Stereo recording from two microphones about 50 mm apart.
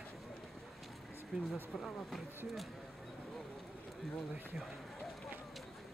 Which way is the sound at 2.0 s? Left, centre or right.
Centre.